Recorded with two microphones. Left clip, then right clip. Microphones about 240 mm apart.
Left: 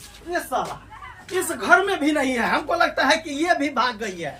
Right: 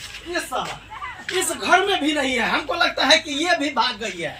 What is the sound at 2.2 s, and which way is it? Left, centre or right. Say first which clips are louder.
A man's voice: right 1 dB; centre.